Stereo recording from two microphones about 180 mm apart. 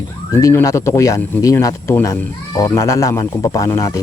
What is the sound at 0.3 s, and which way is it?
A man's voice, 15° left (ahead or behind).